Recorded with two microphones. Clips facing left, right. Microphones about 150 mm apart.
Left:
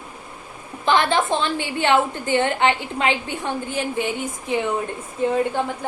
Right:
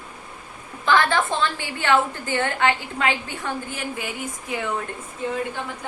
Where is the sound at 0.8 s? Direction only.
20° left (ahead or behind).